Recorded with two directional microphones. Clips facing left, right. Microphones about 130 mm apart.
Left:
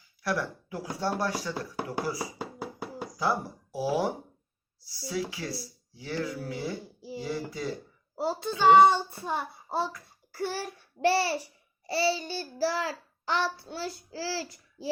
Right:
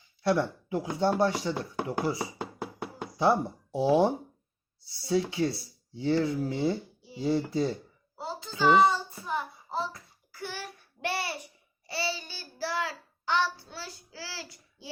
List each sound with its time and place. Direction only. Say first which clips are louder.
0.2 s speech: right 5 dB; 25° right (ahead or behind)
8.1 s a child's voice: left 8 dB; 70° left (ahead or behind)
10.6 s a child's voice: left 9 dB; 35° left (ahead or behind)